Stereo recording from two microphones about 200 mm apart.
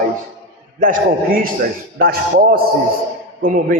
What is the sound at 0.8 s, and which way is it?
A man's voice, 45° right (ahead or behind).